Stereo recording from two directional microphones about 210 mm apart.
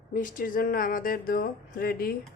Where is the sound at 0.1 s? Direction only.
40° left (ahead or behind).